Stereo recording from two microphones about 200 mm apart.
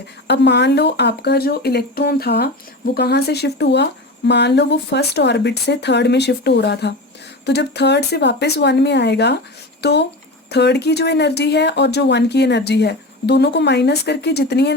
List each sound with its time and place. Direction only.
0.3 s speech: 60° left (ahead or behind)